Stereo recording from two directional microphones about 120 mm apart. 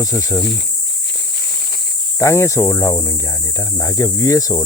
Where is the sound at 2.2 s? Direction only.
25° left (ahead or behind).